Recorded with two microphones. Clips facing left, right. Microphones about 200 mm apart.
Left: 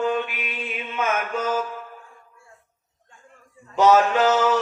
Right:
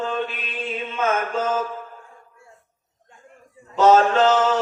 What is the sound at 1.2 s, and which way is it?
Mantra, 25° right (ahead or behind).